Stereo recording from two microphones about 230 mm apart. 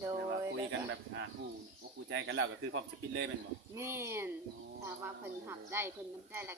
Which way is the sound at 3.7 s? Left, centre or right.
Centre.